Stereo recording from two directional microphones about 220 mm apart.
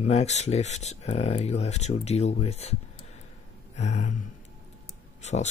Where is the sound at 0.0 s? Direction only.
30° left (ahead or behind).